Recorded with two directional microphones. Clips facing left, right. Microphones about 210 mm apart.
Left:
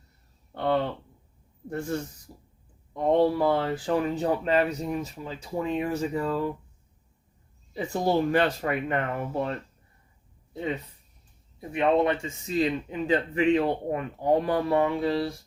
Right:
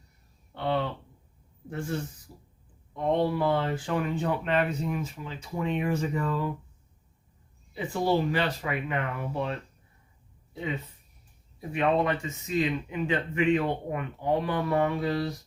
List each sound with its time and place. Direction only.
0.5 s a sound: 45° left (ahead or behind)
2.9 s speech: 40° left (ahead or behind)
7.7 s speech: 45° left (ahead or behind)
11.7 s speech: 25° left (ahead or behind)